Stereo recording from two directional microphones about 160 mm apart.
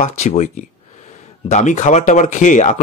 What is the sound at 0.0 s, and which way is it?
Speech, 45° left (ahead or behind).